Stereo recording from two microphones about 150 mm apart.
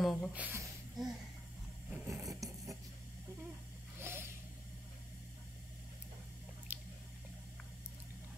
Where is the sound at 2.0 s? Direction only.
20° right (ahead or behind).